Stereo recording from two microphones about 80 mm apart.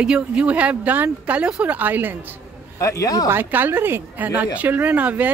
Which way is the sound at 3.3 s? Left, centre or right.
Right.